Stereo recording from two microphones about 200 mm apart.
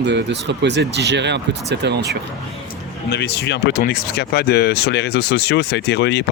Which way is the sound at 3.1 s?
55° left (ahead or behind).